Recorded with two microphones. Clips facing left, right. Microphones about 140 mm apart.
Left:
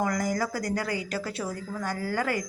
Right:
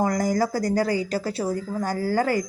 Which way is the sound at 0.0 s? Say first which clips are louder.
Right 5 dB; 35° right (ahead or behind).